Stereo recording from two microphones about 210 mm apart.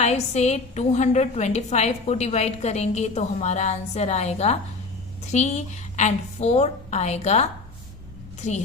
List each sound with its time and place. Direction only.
0.0 s a woman's voice: 30° left (ahead or behind)